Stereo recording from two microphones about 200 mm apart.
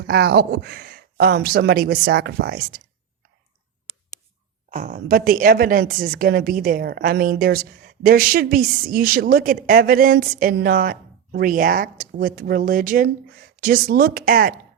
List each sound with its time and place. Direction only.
0.1 s a woman's voice: 50° right (ahead or behind)
4.7 s a woman's voice: 40° right (ahead or behind)